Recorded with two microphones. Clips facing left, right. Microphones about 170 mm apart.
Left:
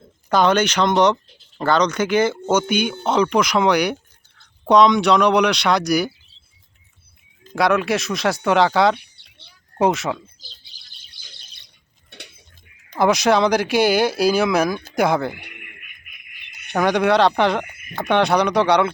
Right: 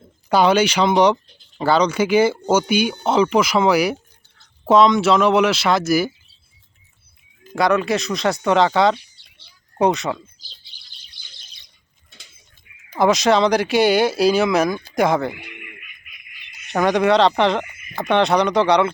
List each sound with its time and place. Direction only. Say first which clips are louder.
0.3 s speech: right 1 dB; 10° right (ahead or behind)
7.5 s speech: even; centre (ahead or behind)
9.0 s a sound: even; 60° left (ahead or behind)
9.7 s speech: even; centre (ahead or behind)
12.1 s a sound: left 10 dB; 70° left (ahead or behind)
12.9 s speech: right 1 dB; centre (ahead or behind)
15.6 s owl: right 4 dB; 55° left (ahead or behind)
16.6 s speech: right 1 dB; centre (ahead or behind)
17.7 s a sound: left 2 dB; 55° left (ahead or behind)
17.9 s speech: right 1 dB; centre (ahead or behind)